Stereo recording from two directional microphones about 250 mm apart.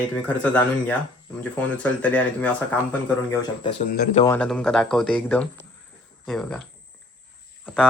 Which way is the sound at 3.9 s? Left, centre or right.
Left.